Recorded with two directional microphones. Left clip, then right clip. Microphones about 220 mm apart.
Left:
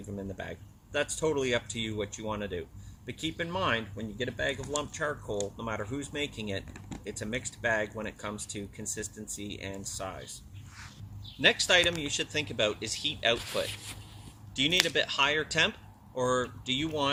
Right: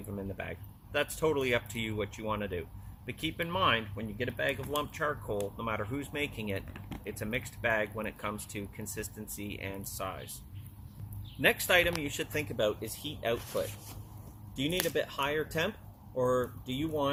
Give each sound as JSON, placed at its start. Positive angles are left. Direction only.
{"t": 0.2, "sound": "speech", "side_deg": 20}
{"t": 11.3, "sound": "speech", "side_deg": 20}
{"t": 12.5, "sound": "speech", "side_deg": 15}